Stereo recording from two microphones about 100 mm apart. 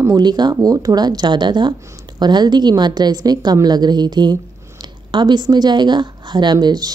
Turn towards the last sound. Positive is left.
turn(degrees=-45)  # may be behind; listen again after turning